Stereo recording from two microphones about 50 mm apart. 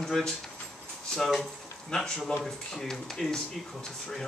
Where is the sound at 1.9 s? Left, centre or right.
Centre.